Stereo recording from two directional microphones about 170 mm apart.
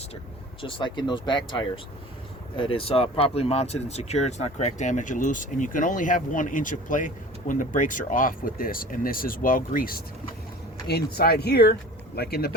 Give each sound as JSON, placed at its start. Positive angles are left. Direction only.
{"t": 0.6, "sound": "speech", "side_deg": 30}
{"t": 10.8, "sound": "speech", "side_deg": 70}